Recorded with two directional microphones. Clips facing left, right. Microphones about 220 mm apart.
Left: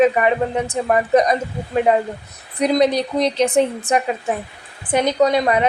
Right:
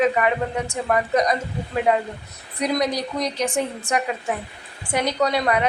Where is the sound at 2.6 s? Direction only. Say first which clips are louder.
Left 6 dB; 25° left (ahead or behind).